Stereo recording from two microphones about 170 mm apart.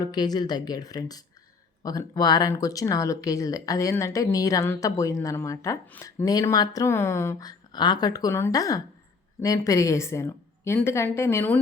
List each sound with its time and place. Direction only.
0.0 s a woman's voice: 25° left (ahead or behind)